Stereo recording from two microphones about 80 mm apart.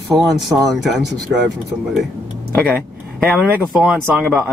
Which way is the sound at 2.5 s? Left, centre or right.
Left.